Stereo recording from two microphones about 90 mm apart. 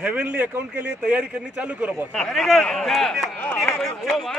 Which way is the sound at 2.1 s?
5° left (ahead or behind).